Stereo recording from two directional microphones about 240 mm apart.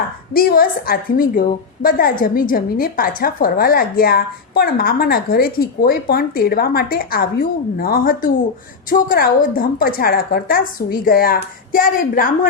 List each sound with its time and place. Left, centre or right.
0.3 s a woman's voice: left